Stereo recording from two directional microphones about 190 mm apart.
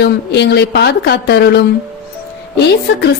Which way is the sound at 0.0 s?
60° left (ahead or behind).